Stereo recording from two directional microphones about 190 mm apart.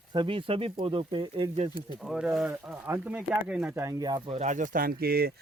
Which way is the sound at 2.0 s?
5° right (ahead or behind).